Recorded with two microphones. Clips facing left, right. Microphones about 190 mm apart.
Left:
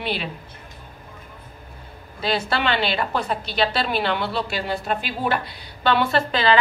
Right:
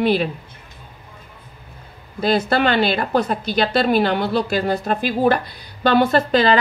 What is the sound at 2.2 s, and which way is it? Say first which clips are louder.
A woman's voice: right 6 dB; 45° right (ahead or behind).